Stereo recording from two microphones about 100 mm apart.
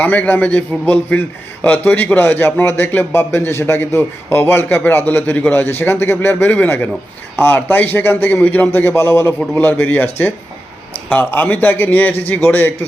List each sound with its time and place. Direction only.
0.0 s a man's voice: 15° left (ahead or behind)